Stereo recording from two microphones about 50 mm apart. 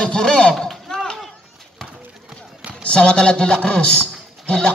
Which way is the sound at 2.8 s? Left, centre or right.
Left.